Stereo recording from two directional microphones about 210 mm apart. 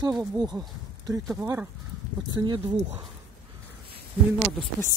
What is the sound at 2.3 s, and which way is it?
Speech, 20° right (ahead or behind).